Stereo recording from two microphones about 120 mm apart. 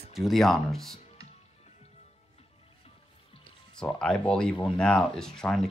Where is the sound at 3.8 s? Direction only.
5° left (ahead or behind).